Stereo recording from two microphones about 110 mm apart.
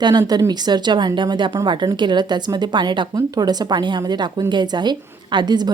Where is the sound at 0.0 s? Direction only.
40° right (ahead or behind).